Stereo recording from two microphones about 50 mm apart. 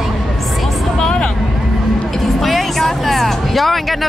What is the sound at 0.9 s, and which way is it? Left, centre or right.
Speech, centre.